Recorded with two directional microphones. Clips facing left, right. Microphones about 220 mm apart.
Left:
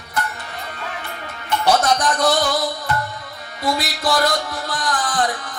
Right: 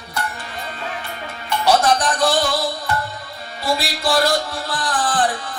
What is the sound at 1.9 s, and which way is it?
Music, 30° right (ahead or behind).